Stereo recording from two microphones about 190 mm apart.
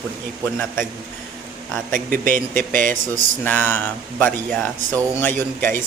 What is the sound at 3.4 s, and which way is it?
Speech, 10° left (ahead or behind).